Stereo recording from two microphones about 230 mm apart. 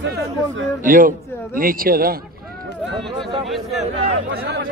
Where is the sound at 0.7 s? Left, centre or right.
Right.